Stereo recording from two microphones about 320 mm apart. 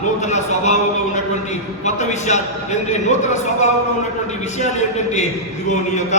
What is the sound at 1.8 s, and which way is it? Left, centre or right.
A man's voice, left.